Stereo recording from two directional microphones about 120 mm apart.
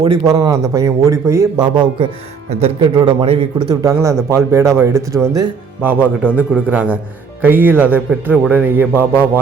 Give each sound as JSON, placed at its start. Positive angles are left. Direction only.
{"t": 0.3, "sound": "a man's voice", "side_deg": -30}
{"t": 1.5, "sound": "speech", "side_deg": -40}
{"t": 2.5, "sound": "speech", "side_deg": -55}
{"t": 2.9, "sound": "a man's voice", "side_deg": -40}
{"t": 4.3, "sound": "a man's voice", "side_deg": -25}
{"t": 5.8, "sound": "a man's voice", "side_deg": -15}